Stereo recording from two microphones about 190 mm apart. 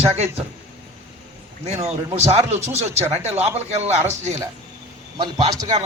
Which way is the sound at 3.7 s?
35° right (ahead or behind).